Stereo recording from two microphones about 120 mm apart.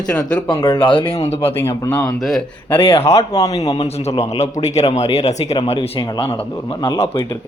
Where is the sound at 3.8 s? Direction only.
60° left (ahead or behind).